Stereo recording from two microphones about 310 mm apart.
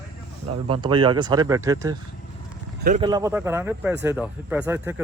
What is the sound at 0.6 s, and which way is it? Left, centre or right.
Speech, centre.